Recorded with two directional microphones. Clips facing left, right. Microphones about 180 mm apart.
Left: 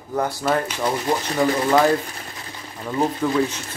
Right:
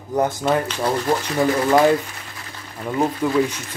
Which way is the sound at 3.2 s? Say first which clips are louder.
Right 1 dB; 5° right (ahead or behind).